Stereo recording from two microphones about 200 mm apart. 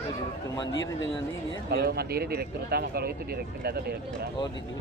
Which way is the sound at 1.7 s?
50° right (ahead or behind).